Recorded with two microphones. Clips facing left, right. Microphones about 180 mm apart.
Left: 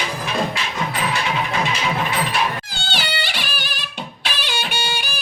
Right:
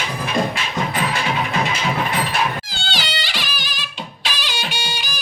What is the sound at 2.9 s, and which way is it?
Music, 60° left (ahead or behind).